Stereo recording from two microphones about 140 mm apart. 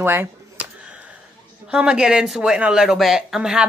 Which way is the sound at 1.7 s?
5° right (ahead or behind).